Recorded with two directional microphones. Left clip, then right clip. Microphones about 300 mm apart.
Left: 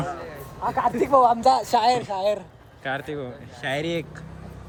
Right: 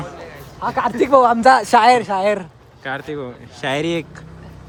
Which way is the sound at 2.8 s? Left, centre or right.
Centre.